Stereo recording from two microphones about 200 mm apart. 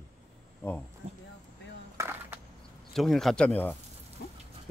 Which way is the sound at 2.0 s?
10° right (ahead or behind).